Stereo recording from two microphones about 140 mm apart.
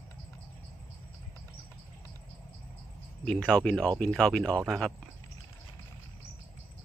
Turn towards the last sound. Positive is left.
turn(degrees=5)  # may be behind; listen again after turning